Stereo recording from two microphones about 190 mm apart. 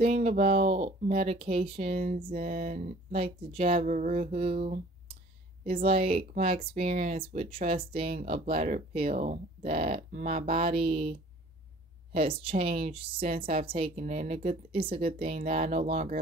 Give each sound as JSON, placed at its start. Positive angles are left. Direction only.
{"t": 0.0, "sound": "speech", "side_deg": -35}
{"t": 1.9, "sound": "a sound", "side_deg": -50}
{"t": 2.2, "sound": "speech", "side_deg": -30}
{"t": 2.5, "sound": "speech", "side_deg": -45}
{"t": 5.7, "sound": "speech", "side_deg": -30}
{"t": 10.4, "sound": "a woman's voice", "side_deg": -30}
{"t": 13.9, "sound": "speech", "side_deg": -40}
{"t": 15.6, "sound": "speech", "side_deg": -40}